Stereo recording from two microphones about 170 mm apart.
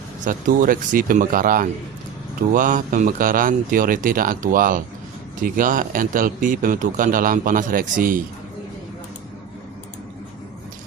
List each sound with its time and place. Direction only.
0.3 s a man's voice: 55° right (ahead or behind)